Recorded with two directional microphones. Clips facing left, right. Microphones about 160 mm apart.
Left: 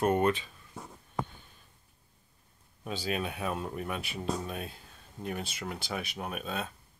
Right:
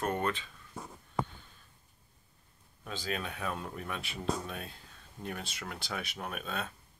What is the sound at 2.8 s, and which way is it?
Speech, 10° left (ahead or behind).